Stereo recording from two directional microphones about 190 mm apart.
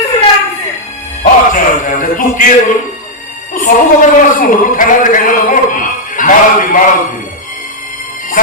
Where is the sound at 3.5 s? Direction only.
45° left (ahead or behind).